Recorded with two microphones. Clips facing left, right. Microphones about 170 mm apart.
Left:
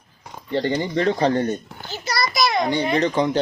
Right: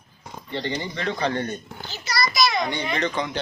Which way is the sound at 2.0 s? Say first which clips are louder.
Left 1 dB; 55° left (ahead or behind).